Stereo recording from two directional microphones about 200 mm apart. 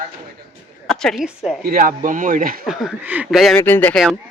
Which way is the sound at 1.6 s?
45° right (ahead or behind).